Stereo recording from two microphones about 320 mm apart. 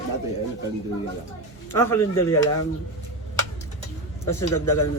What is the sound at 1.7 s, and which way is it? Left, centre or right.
Speech, centre.